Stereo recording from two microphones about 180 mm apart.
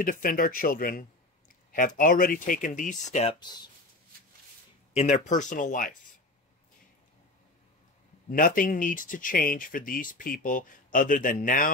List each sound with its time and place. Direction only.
0.0 s speech: 50° left (ahead or behind)
4.9 s speech: 40° left (ahead or behind)
8.3 s speech: 50° left (ahead or behind)